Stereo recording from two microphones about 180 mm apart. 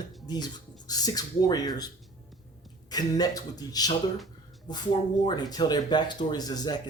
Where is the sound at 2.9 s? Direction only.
20° left (ahead or behind).